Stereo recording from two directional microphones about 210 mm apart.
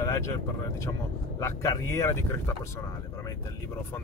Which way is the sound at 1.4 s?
15° left (ahead or behind).